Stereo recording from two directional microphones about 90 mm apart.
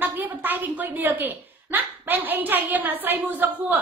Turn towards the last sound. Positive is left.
turn(degrees=-20)  # may be behind; listen again after turning